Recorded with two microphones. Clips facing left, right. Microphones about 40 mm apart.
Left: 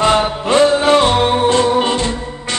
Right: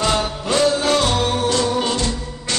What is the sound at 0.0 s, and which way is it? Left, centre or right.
Music, left.